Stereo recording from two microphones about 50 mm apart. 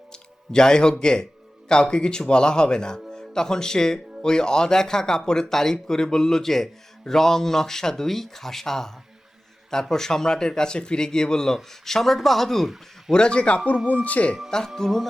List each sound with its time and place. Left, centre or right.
0.1 s a sound: centre
0.9 s speech: centre
9.9 s speech: centre
13.1 s a man's voice: centre
14.8 s music: centre